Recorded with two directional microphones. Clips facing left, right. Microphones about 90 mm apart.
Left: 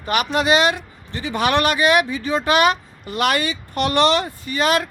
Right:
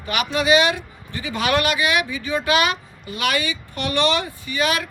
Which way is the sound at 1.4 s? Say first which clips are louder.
Left 3 dB; 35° left (ahead or behind).